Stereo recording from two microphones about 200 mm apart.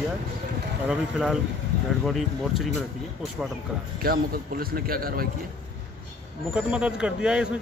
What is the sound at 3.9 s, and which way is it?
A man's voice, 50° right (ahead or behind).